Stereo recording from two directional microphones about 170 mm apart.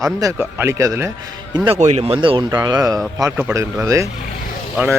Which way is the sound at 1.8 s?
40° right (ahead or behind).